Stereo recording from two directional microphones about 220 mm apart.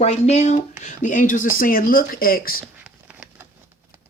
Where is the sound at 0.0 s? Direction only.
30° left (ahead or behind).